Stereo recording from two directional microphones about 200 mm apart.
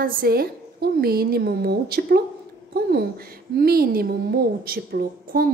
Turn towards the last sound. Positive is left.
turn(degrees=-50)  # may be behind; listen again after turning